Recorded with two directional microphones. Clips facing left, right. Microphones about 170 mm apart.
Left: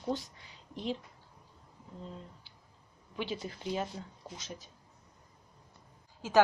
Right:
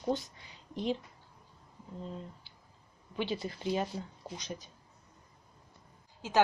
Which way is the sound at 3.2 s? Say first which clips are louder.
Right 3 dB; 5° left (ahead or behind).